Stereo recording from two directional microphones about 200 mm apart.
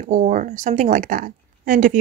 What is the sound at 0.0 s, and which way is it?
Speech, 40° right (ahead or behind).